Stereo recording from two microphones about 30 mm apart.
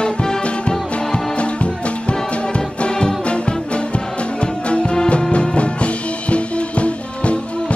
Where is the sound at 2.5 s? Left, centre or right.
Left.